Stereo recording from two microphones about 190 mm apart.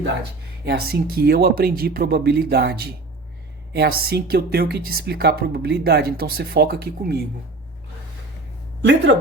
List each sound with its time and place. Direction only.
0.6 s a woman's voice: 55° right (ahead or behind)
8.8 s a woman's voice: 65° right (ahead or behind)